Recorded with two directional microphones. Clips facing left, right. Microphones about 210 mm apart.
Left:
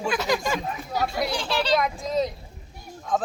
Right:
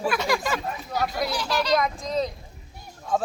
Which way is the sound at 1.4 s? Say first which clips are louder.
Even; 30° left (ahead or behind).